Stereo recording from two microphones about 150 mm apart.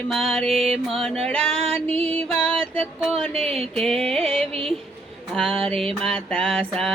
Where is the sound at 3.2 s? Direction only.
40° right (ahead or behind).